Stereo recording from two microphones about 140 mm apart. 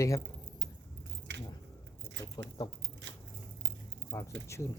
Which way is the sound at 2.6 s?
25° left (ahead or behind).